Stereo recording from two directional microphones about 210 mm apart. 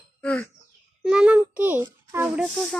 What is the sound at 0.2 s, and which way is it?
Speech, 5° left (ahead or behind).